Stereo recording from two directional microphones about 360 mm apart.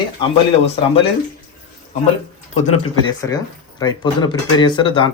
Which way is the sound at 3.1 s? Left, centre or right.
Centre.